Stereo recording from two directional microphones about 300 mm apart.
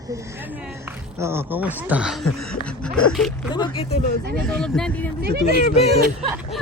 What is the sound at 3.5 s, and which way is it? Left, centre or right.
Speech, centre.